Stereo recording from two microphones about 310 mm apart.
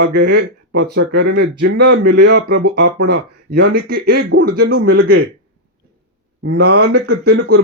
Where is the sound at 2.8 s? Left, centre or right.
Right.